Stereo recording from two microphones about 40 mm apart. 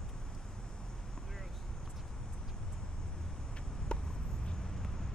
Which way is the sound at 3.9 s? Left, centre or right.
Left.